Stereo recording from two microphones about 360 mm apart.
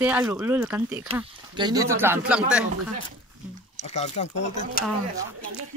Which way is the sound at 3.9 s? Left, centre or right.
Centre.